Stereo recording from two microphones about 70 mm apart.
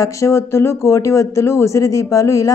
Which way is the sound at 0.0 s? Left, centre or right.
Left.